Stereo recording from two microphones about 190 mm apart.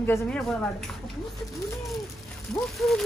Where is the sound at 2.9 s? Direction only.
Centre (ahead or behind).